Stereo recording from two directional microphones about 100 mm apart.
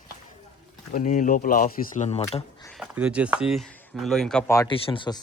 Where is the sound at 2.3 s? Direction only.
50° left (ahead or behind).